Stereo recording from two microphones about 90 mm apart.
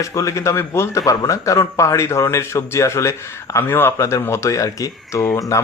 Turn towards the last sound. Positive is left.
turn(degrees=35)  # may be behind; listen again after turning